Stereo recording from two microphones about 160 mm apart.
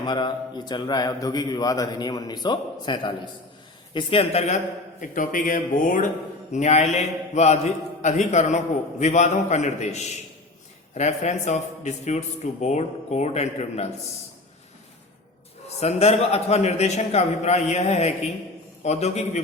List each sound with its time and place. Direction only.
0.0 s a man's voice: 30° left (ahead or behind); by 13.8 s 45° left (ahead or behind)
15.8 s a man's voice: 40° left (ahead or behind)